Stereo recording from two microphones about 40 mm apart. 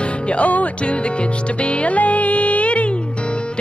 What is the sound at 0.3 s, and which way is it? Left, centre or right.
Music, left.